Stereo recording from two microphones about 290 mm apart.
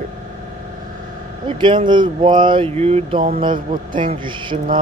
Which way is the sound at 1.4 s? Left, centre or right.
Centre.